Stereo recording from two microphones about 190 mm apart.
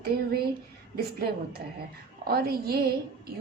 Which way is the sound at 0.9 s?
55° right (ahead or behind).